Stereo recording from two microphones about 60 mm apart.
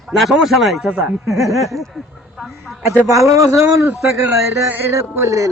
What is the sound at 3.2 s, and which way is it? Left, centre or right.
Speech, right.